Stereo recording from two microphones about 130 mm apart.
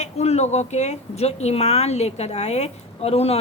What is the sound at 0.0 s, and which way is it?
A woman's voice, 55° left (ahead or behind).